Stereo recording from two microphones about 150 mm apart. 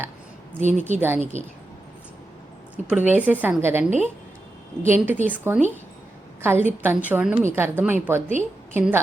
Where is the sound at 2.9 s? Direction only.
10° right (ahead or behind).